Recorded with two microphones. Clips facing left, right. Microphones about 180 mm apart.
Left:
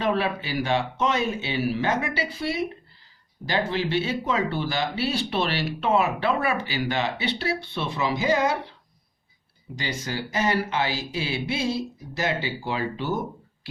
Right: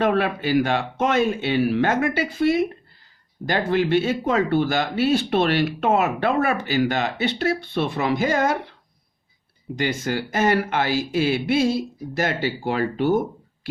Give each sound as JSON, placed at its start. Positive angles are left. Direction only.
{"t": 0.0, "sound": "speech", "side_deg": -55}
{"t": 9.7, "sound": "speech", "side_deg": -55}